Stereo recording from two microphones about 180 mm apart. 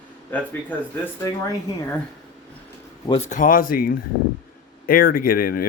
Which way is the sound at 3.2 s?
45° left (ahead or behind).